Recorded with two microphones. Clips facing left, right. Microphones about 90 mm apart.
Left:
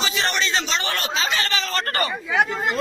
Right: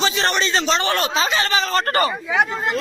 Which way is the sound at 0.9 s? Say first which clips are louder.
Right 4 dB; 25° right (ahead or behind).